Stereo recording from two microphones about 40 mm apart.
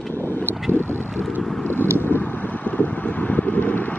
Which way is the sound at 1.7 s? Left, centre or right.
Left.